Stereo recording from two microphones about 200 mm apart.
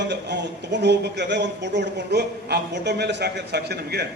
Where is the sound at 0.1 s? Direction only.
60° right (ahead or behind).